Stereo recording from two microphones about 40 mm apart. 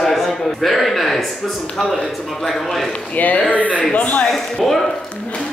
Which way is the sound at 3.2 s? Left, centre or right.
Left.